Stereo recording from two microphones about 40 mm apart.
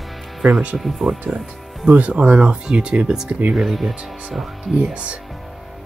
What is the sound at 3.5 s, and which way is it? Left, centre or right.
Speech, centre.